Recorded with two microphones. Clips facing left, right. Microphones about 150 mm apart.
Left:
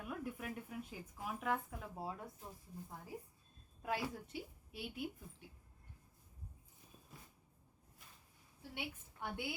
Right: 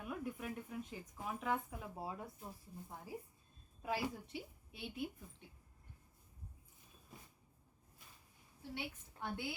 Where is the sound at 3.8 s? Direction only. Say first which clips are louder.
Right 1 dB; centre (ahead or behind).